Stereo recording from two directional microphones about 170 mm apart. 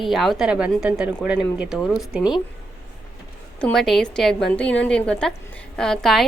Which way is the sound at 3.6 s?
Centre (ahead or behind).